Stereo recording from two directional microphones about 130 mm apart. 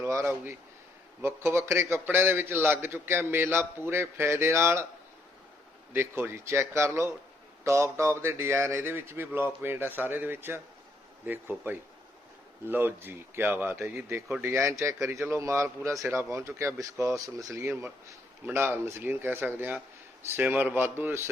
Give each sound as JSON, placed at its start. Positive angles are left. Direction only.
{"t": 0.0, "sound": "a man's voice", "side_deg": -20}
{"t": 5.9, "sound": "a man's voice", "side_deg": -20}